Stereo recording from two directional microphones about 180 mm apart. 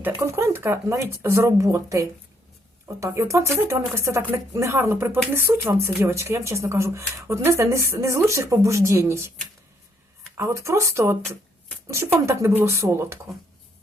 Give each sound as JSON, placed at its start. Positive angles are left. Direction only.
{"t": 0.0, "sound": "speech", "side_deg": -15}
{"t": 10.3, "sound": "speech", "side_deg": -15}